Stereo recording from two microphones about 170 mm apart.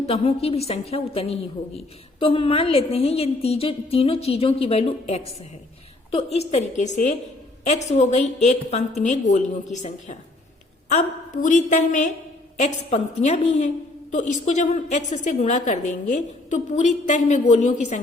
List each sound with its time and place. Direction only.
0.0 s a woman's voice: 35° left (ahead or behind)